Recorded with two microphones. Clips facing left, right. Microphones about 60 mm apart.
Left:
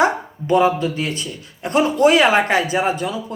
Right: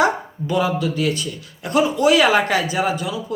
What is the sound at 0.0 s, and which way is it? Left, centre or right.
A man's voice, left.